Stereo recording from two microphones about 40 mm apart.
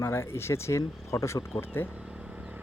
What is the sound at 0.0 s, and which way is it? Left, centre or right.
Speech, left.